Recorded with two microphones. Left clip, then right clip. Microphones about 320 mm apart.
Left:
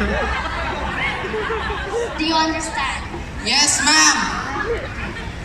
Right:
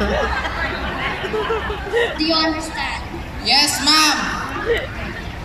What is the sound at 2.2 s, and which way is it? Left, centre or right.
A woman's voice, centre.